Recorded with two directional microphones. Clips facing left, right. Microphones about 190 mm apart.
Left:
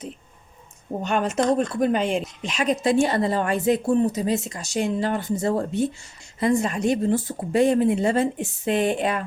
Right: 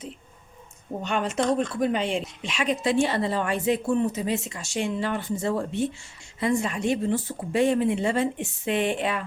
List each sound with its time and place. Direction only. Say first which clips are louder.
1.0 s a woman's voice: left 3 dB; 45° left (ahead or behind)